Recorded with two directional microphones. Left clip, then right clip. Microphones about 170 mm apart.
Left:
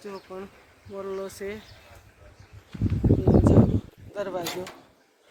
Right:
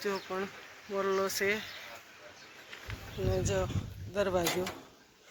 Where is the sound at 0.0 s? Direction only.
5° right (ahead or behind).